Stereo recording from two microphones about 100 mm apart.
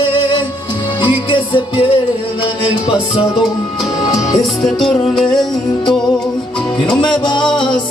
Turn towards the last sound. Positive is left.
turn(degrees=50)  # may be behind; listen again after turning